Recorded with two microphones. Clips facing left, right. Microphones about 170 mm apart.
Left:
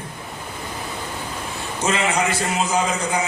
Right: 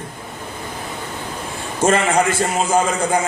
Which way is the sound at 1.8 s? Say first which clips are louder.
Right 5 dB; 50° right (ahead or behind).